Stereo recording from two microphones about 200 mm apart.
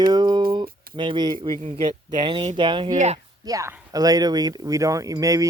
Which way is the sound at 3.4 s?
15° right (ahead or behind).